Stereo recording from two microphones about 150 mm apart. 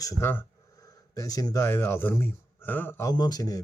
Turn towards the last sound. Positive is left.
turn(degrees=25)  # may be behind; listen again after turning